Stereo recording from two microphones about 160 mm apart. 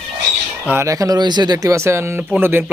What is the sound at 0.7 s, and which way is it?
Speech, 15° right (ahead or behind).